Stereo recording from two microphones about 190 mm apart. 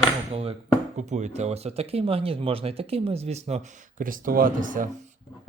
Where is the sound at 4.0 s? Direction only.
45° right (ahead or behind).